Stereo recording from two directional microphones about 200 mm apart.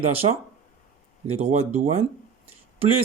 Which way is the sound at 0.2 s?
30° right (ahead or behind).